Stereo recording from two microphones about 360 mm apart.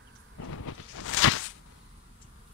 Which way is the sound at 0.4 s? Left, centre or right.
Left.